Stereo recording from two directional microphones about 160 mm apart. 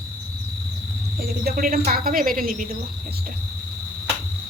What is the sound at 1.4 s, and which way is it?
Speech, 65° right (ahead or behind).